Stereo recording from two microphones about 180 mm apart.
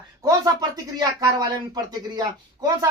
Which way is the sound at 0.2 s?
20° right (ahead or behind).